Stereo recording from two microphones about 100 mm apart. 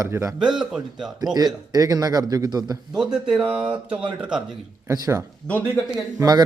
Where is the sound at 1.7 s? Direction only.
40° right (ahead or behind).